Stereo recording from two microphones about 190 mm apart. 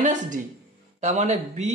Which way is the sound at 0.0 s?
40° right (ahead or behind).